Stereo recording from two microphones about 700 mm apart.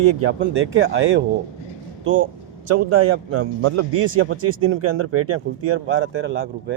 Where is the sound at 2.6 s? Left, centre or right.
Centre.